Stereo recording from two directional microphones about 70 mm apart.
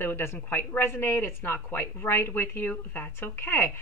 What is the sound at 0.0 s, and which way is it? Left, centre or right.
A woman's voice, left.